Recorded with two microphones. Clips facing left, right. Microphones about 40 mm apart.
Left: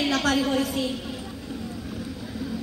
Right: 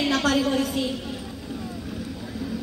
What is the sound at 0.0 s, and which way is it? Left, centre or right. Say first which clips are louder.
Speech: right 1 dB; centre.